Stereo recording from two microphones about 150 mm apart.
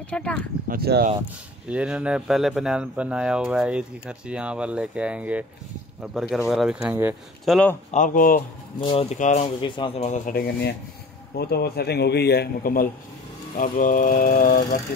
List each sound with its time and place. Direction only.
0.1 s speech: 5° left (ahead or behind)
0.7 s speech: 90° right
1.7 s speech: 5° right (ahead or behind)
6.5 s speech: 5° right (ahead or behind)
6.9 s speech: 15° right (ahead or behind)
7.4 s speech: centre (ahead or behind)
7.9 s speech: 60° left (ahead or behind)
9.1 s speech: 50° left (ahead or behind)
9.6 s speech: 35° left (ahead or behind)
10.0 s speech: 50° left (ahead or behind)
10.3 s a man's voice: 90° left; by 14.8 s 65° left (ahead or behind)